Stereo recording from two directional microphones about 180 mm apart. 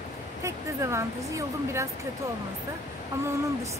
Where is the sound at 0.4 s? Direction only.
15° right (ahead or behind).